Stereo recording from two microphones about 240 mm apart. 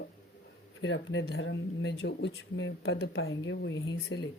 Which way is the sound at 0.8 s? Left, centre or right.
Left.